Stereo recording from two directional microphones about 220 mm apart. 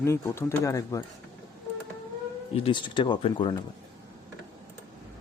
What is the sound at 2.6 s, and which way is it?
Speech, 20° left (ahead or behind).